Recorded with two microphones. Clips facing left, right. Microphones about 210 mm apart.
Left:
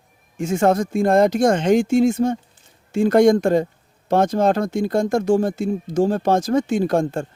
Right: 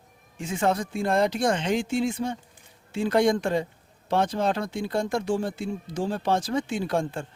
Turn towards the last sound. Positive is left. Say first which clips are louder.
# left 8 dB
turn(degrees=45)  # may be behind; listen again after turning